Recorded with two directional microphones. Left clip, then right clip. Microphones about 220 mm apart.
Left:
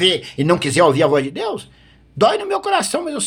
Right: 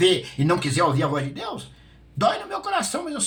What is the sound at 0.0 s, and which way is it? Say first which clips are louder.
Speech: left 3 dB; 50° left (ahead or behind).